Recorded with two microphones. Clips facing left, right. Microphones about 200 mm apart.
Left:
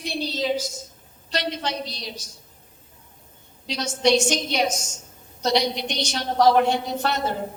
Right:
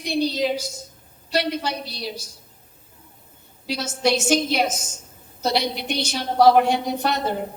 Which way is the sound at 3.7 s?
5° right (ahead or behind).